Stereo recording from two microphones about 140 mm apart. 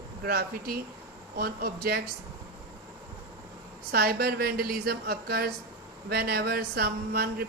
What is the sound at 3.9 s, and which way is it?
Speech, 90° right.